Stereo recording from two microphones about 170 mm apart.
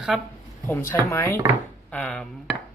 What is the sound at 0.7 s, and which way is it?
Speech, 15° left (ahead or behind).